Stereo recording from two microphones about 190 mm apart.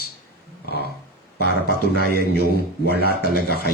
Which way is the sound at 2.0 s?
55° right (ahead or behind).